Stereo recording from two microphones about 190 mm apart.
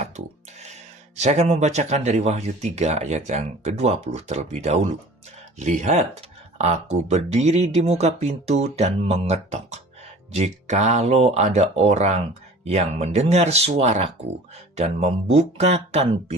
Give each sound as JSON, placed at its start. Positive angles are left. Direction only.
{"t": 1.2, "sound": "speech", "side_deg": -35}